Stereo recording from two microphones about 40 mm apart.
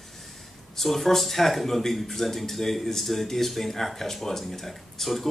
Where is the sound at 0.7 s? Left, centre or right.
Centre.